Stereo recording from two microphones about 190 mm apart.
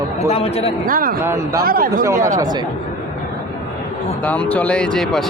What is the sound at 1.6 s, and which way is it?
Speech, 50° right (ahead or behind).